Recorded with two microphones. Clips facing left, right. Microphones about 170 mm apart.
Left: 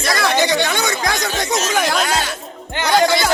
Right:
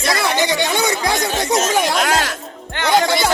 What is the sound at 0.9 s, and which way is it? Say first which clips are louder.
Speech: right 2 dB; 30° right (ahead or behind).